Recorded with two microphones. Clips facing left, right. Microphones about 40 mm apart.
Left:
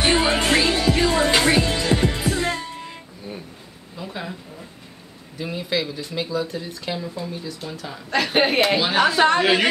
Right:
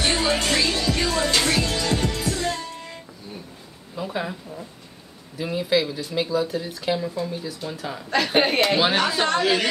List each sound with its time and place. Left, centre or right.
0.0 s music: left
3.9 s a sound: centre
5.4 s a woman's voice: centre; by 9.7 s left